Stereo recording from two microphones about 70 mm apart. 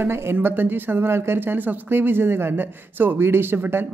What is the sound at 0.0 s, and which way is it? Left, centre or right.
Speech, right.